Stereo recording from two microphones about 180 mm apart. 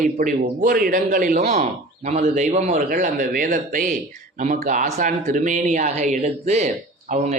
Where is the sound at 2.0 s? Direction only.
40° right (ahead or behind).